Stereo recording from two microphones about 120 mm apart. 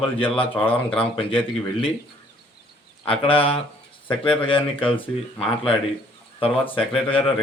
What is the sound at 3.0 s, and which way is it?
Speech, 50° left (ahead or behind).